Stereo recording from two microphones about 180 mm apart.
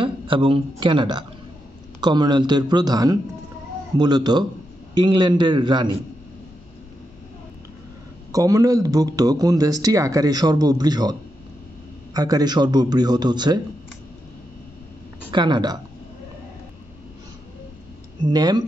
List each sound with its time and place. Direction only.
0.0 s a man's voice: 30° right (ahead or behind)
8.3 s a man's voice: 20° right (ahead or behind)
15.3 s a man's voice: 25° right (ahead or behind)
18.2 s a man's voice: 25° right (ahead or behind)